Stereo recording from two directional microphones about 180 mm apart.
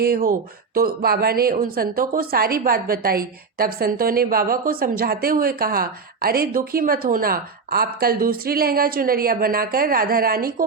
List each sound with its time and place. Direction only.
0.0 s speech: 55° right (ahead or behind)